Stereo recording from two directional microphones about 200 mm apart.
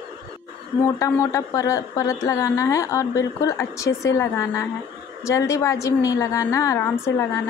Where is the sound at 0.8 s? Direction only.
15° left (ahead or behind).